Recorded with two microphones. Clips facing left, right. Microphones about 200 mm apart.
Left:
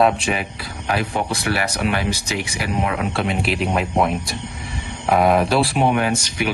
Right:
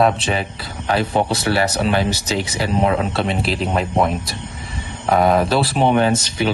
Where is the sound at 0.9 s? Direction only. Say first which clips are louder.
Right 4 dB; 30° right (ahead or behind).